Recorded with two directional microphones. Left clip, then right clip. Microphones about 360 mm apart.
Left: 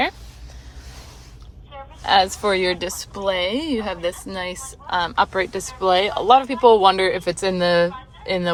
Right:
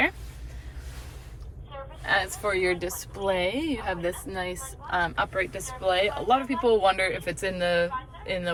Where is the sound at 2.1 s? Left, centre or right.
Centre.